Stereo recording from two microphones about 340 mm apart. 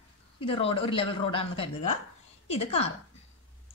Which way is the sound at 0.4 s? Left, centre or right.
Centre.